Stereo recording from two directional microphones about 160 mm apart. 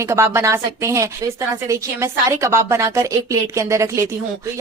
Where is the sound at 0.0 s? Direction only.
15° right (ahead or behind).